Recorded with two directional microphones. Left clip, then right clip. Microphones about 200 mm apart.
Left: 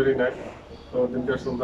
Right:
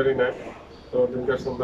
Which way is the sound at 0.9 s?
5° right (ahead or behind).